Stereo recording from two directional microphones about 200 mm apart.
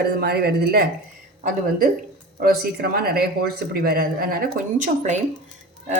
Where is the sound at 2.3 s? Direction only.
45° right (ahead or behind).